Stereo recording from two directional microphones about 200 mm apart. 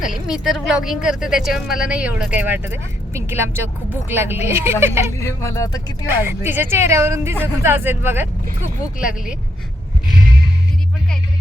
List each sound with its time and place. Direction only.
0.0 s a woman's voice: centre (ahead or behind)
5.1 s speech: 15° left (ahead or behind)
6.1 s speech: 10° right (ahead or behind)